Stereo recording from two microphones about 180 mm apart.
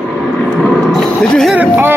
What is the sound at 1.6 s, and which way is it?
Speech, 10° right (ahead or behind).